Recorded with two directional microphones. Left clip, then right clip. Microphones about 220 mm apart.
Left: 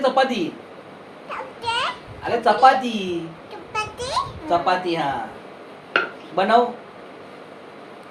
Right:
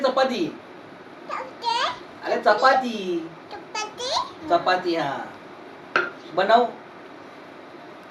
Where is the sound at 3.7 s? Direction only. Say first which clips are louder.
Left 2 dB; 10° left (ahead or behind).